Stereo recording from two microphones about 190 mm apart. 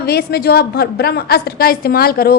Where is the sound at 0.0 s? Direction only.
55° left (ahead or behind).